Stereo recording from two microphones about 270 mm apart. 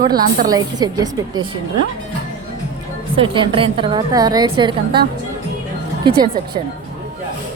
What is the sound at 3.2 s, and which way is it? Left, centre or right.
A woman's voice, centre.